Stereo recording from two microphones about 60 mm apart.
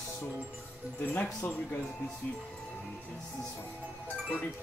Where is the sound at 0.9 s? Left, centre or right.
Left.